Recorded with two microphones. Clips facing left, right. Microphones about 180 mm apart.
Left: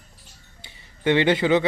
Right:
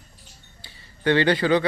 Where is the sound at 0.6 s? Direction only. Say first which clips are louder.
Even; 20° left (ahead or behind).